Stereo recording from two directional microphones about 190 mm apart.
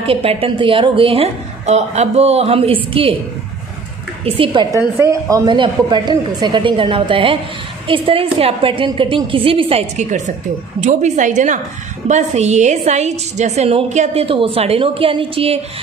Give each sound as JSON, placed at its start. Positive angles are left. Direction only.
{"t": 0.0, "sound": "a woman's voice", "side_deg": -30}
{"t": 4.2, "sound": "a woman's voice", "side_deg": -25}